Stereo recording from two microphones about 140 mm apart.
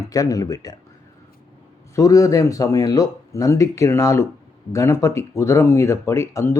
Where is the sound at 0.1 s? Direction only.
25° left (ahead or behind).